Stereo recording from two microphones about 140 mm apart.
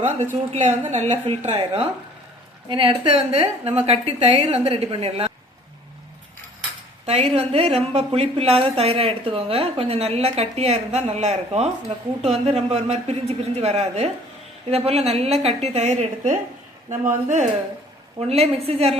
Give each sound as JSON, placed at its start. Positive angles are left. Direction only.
{"t": 0.5, "sound": "a woman's voice", "side_deg": -60}
{"t": 2.6, "sound": "a woman's voice", "side_deg": -35}
{"t": 7.0, "sound": "a woman's voice", "side_deg": -50}
{"t": 18.3, "sound": "a woman's voice", "side_deg": -45}